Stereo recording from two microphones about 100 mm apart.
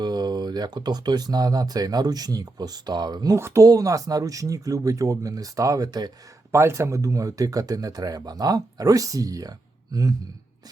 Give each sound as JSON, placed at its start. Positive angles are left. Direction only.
{"t": 0.0, "sound": "speech", "side_deg": -45}
{"t": 3.3, "sound": "speech", "side_deg": -30}
{"t": 6.5, "sound": "speech", "side_deg": -30}